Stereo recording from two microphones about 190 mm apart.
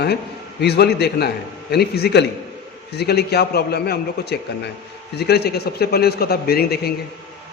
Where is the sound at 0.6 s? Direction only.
60° left (ahead or behind).